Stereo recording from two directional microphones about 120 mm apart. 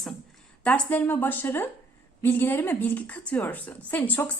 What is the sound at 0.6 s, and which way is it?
A woman's voice, 15° left (ahead or behind).